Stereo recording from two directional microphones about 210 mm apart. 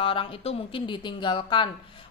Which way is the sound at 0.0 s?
25° left (ahead or behind).